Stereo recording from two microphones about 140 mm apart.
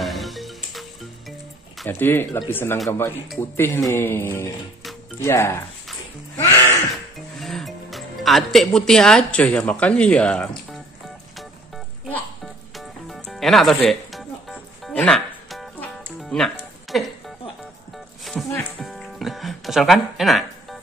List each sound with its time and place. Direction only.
0.0 s music: centre (ahead or behind)
1.9 s speech: 15° left (ahead or behind)
6.3 s music: 20° left (ahead or behind)
7.3 s speech: centre (ahead or behind)
12.7 s music: centre (ahead or behind)
18.2 s music: centre (ahead or behind)